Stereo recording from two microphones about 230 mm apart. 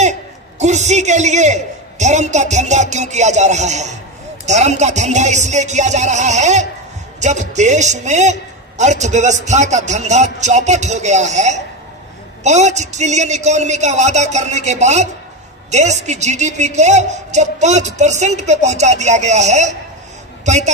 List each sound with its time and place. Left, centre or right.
0.6 s a man's voice: right